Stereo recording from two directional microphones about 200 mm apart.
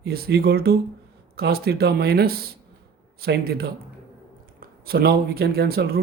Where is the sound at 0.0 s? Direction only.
50° right (ahead or behind).